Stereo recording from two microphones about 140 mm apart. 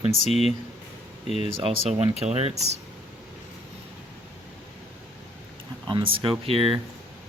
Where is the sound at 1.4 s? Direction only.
45° right (ahead or behind).